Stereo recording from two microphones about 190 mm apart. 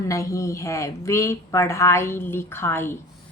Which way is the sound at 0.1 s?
15° left (ahead or behind).